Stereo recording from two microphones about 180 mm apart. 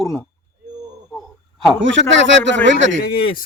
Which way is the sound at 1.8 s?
90° right.